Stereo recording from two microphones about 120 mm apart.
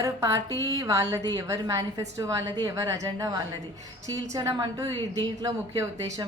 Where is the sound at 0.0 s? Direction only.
30° right (ahead or behind).